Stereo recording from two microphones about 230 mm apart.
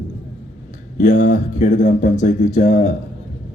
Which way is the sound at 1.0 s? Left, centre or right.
Left.